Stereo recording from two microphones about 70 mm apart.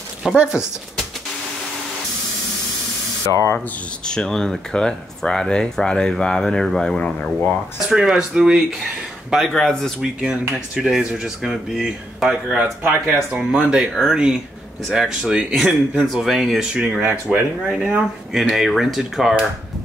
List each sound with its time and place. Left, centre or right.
0.4 s speech: centre
3.3 s speech: left
3.5 s speech: centre
7.9 s speech: centre
9.3 s speech: centre
10.5 s speech: centre
12.3 s speech: centre
13.4 s speech: centre
17.0 s speech: right
17.6 s speech: centre